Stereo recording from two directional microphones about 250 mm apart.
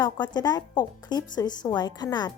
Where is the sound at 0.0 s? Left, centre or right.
Centre.